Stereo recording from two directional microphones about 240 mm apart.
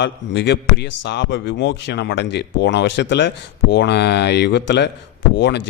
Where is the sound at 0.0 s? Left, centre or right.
Left.